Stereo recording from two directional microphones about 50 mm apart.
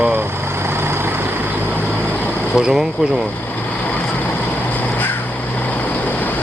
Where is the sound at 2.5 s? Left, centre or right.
Centre.